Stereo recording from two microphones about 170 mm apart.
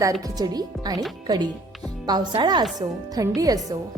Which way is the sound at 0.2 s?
20° right (ahead or behind).